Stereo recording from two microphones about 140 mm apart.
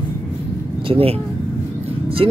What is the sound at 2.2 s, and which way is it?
Speech, 40° right (ahead or behind).